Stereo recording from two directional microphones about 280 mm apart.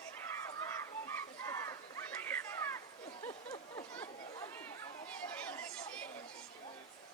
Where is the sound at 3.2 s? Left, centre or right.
Centre.